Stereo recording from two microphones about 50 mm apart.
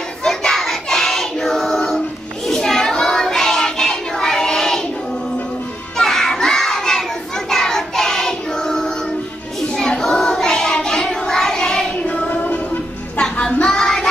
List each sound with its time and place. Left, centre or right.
0.2 s child singing: centre
2.4 s a sound: centre
5.9 s child singing: centre
12.1 s music: left
13.2 s child singing: centre